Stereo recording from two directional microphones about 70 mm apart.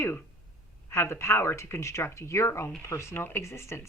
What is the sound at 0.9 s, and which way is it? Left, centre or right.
Speech, left.